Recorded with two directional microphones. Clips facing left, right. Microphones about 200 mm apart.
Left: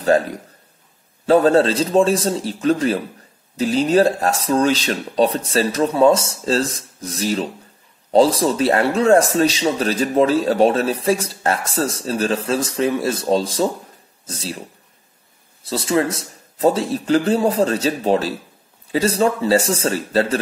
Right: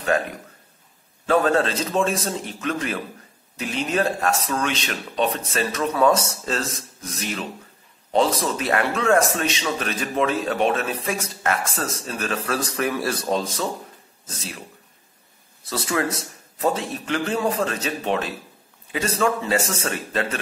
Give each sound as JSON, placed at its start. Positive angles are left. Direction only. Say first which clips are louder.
{"t": 1.2, "sound": "a man's voice", "louder": "left 6 dB", "side_deg": 35}
{"t": 15.6, "sound": "a man's voice", "louder": "left 5 dB", "side_deg": 25}